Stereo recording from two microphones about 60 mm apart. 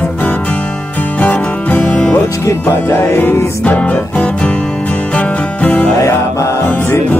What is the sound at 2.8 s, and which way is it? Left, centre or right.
Music, left.